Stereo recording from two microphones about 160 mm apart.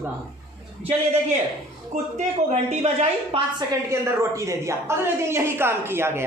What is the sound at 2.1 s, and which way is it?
Speech, 45° right (ahead or behind).